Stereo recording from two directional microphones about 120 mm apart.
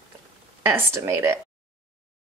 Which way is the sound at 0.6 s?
20° right (ahead or behind).